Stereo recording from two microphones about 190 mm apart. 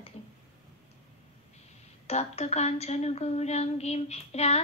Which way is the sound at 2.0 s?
35° left (ahead or behind).